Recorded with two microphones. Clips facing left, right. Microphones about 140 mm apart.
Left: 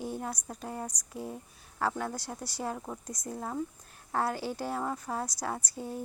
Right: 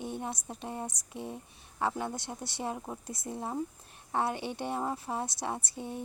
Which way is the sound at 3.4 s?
25° right (ahead or behind).